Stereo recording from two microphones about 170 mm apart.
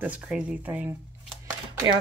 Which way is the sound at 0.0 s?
5° right (ahead or behind).